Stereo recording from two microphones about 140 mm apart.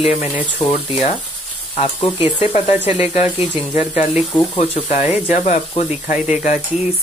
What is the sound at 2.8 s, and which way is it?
Speech, 45° left (ahead or behind).